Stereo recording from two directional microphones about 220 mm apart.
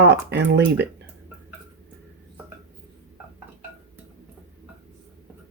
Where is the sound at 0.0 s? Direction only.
50° right (ahead or behind).